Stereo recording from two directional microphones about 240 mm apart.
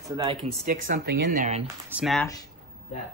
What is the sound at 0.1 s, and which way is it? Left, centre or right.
Speech, centre.